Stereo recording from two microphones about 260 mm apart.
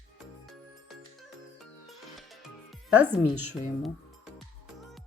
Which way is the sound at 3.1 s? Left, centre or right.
Left.